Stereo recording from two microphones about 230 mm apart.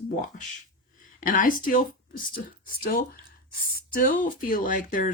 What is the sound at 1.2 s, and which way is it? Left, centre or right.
A woman's voice, left.